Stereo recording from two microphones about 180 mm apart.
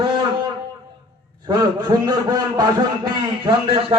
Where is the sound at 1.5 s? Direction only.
25° right (ahead or behind).